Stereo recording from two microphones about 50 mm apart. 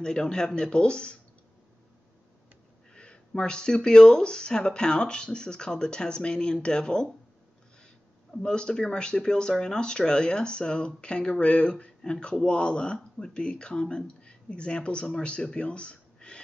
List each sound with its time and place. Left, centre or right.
0.0 s speech: centre
2.9 s speech: centre
8.5 s speech: centre